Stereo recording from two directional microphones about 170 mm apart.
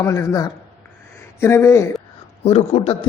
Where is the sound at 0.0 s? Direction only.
15° left (ahead or behind).